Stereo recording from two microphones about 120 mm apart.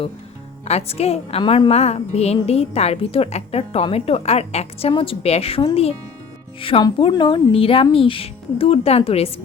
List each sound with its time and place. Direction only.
0.6 s a woman's voice: 60° left (ahead or behind)